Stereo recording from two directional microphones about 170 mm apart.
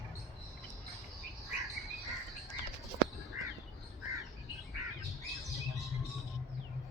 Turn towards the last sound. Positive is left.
turn(degrees=0)  # may be behind; listen again after turning